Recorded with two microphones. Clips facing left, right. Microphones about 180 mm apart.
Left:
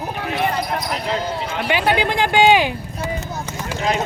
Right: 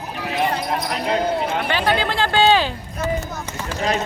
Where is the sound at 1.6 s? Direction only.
15° left (ahead or behind).